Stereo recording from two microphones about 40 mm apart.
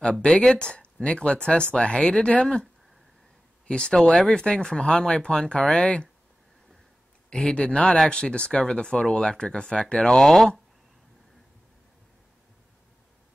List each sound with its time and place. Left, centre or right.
0.3 s speech: centre
2.4 s speech: centre
7.2 s speech: left
10.1 s speech: centre